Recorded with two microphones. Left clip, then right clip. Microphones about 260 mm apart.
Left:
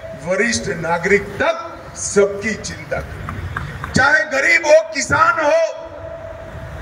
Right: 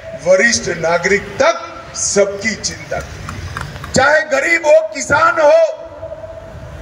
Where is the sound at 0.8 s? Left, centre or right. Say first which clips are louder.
Right 2 dB; right.